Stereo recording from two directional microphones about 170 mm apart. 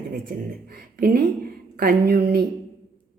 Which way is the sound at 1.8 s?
65° right (ahead or behind).